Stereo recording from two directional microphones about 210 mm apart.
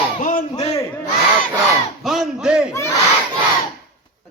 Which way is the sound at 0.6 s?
20° left (ahead or behind).